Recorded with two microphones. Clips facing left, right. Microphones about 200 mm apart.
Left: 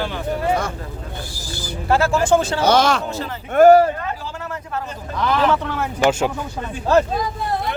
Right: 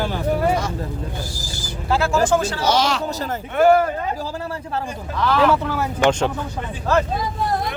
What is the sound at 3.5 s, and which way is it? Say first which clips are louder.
Speech: left 5 dB; 40° left (ahead or behind).